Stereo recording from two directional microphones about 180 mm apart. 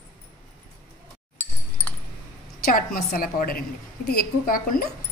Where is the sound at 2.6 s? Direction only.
50° left (ahead or behind).